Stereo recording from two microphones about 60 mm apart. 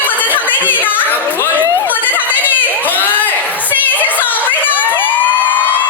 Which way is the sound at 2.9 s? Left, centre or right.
Left.